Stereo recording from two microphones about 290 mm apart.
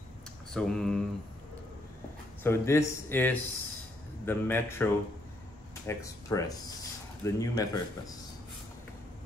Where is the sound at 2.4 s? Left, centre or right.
Centre.